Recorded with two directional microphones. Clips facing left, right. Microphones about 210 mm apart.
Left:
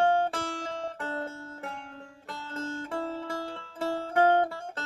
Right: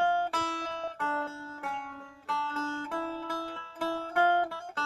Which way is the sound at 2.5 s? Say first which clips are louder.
Left 3 dB; 40° left (ahead or behind).